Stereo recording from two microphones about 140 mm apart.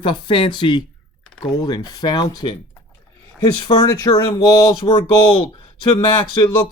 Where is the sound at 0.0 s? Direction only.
35° left (ahead or behind).